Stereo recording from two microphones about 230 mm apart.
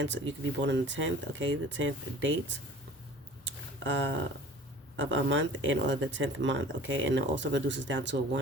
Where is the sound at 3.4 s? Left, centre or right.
Right.